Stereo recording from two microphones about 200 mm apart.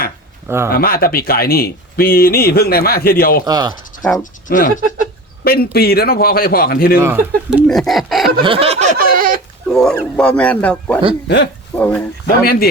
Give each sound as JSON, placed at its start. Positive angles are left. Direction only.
{"t": 0.4, "sound": "speech", "side_deg": -10}
{"t": 0.7, "sound": "speech", "side_deg": 50}
{"t": 3.4, "sound": "speech", "side_deg": -20}
{"t": 4.2, "sound": "speech", "side_deg": 40}
{"t": 7.0, "sound": "speech", "side_deg": -10}
{"t": 7.7, "sound": "speech", "side_deg": 0}
{"t": 8.4, "sound": "a sound", "side_deg": -25}
{"t": 9.6, "sound": "a man's voice", "side_deg": 0}